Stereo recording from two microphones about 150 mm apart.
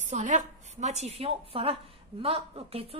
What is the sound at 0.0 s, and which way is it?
A woman's voice, 55° right (ahead or behind).